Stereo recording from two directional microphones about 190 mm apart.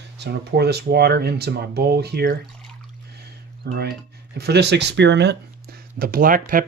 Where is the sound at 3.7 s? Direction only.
60° right (ahead or behind).